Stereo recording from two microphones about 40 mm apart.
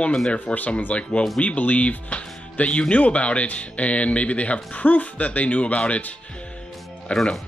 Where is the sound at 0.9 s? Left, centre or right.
Left.